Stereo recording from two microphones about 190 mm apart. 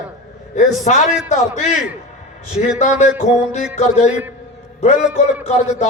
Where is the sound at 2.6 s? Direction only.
40° left (ahead or behind).